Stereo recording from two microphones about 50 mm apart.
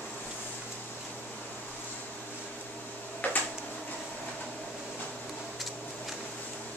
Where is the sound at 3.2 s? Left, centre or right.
Left.